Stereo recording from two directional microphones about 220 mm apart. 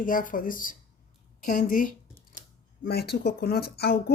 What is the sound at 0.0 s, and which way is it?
Speech, 40° left (ahead or behind).